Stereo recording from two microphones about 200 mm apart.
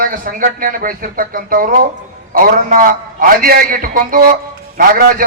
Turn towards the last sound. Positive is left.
turn(degrees=-45)  # may be behind; listen again after turning